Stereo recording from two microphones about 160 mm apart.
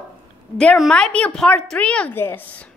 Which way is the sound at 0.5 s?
Centre (ahead or behind).